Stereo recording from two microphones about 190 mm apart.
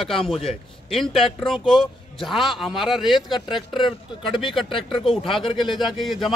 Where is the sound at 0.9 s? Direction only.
Centre (ahead or behind).